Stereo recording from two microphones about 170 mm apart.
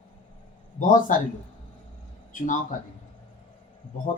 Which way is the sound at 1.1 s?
50° left (ahead or behind).